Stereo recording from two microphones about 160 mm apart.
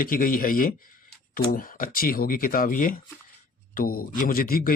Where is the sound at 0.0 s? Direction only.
60° left (ahead or behind).